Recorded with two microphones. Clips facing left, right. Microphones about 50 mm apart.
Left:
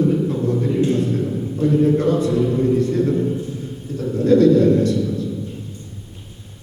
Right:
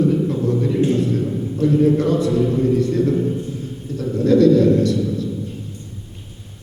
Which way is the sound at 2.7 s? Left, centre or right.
Left.